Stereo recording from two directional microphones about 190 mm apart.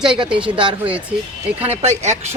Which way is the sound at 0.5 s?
25° right (ahead or behind).